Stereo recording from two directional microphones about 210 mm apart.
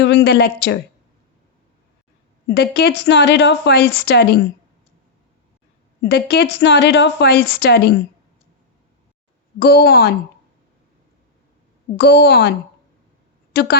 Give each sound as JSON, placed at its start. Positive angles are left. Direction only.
{"t": 0.0, "sound": "a woman's voice", "side_deg": 55}
{"t": 2.6, "sound": "a woman's voice", "side_deg": 50}
{"t": 6.1, "sound": "a woman's voice", "side_deg": 50}
{"t": 9.6, "sound": "a woman's voice", "side_deg": 50}
{"t": 11.9, "sound": "a woman's voice", "side_deg": 55}